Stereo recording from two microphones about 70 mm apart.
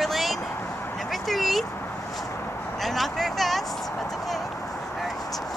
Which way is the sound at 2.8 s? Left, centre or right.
Centre.